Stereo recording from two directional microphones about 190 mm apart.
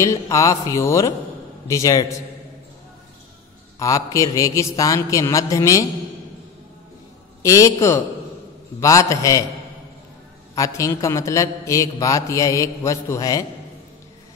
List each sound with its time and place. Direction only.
0.0 s a man's voice: 15° left (ahead or behind)
3.8 s a man's voice: 15° left (ahead or behind)
7.4 s a man's voice: 15° left (ahead or behind)
10.5 s a man's voice: 15° left (ahead or behind)